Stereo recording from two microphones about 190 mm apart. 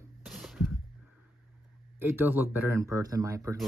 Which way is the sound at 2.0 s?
10° right (ahead or behind).